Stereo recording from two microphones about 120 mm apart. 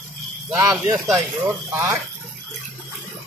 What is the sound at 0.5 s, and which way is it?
Speech, 25° right (ahead or behind).